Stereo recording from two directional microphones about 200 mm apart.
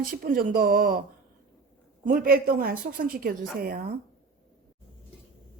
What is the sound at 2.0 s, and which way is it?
Speech, 45° right (ahead or behind).